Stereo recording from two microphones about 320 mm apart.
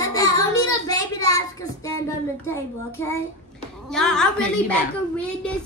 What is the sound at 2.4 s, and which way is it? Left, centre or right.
A child's voice, centre.